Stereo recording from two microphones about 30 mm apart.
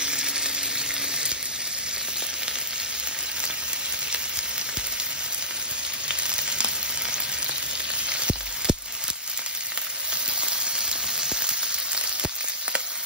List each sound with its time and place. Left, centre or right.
0.0 s sizzle: right
6.0 s sizzle: right
8.1 s a sound: right
10.4 s frying: right